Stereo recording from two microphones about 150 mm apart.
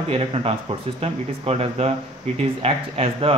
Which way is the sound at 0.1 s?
40° right (ahead or behind).